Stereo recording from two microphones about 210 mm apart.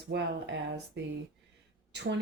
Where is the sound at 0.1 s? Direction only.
55° right (ahead or behind).